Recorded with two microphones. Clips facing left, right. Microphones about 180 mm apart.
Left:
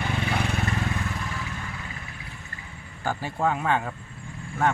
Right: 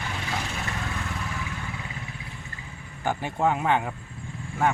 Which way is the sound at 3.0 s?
20° right (ahead or behind).